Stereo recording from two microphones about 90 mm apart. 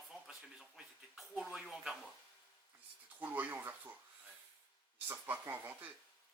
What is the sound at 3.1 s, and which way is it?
Speech, 20° right (ahead or behind).